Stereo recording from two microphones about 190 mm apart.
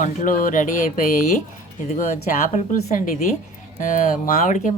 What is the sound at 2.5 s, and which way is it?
Speech, 40° left (ahead or behind).